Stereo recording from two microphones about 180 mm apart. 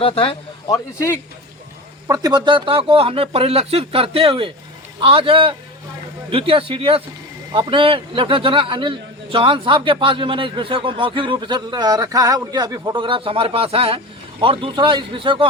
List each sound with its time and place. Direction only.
0.0 s speech: 30° left (ahead or behind)
2.0 s a man's voice: 20° right (ahead or behind)